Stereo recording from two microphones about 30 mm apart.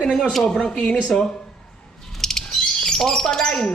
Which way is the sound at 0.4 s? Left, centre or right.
Left.